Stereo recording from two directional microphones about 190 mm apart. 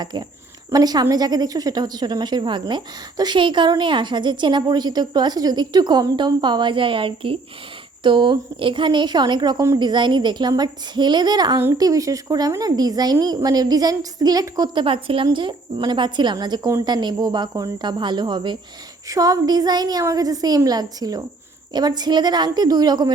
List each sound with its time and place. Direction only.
0.0 s a woman's voice: 20° right (ahead or behind)